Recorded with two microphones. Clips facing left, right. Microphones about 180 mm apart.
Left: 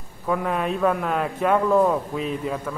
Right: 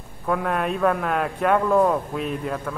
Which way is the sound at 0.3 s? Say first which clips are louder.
Even; centre (ahead or behind).